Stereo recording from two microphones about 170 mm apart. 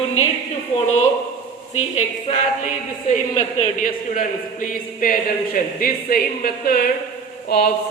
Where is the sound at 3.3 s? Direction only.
50° left (ahead or behind).